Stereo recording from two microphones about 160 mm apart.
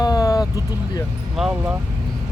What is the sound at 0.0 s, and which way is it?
Vehicle, 20° left (ahead or behind).